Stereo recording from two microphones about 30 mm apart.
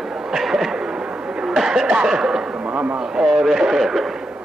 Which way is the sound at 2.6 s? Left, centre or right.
Right.